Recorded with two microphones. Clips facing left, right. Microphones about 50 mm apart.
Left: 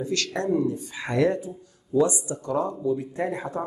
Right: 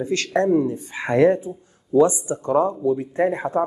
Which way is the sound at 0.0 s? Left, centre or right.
Right.